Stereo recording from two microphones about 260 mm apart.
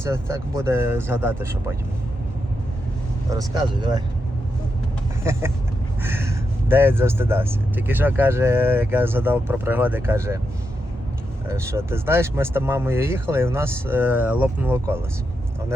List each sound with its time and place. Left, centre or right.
0.0 s speech: centre
3.2 s speech: centre
5.2 s vehicle: centre
6.0 s speech: centre
11.4 s speech: centre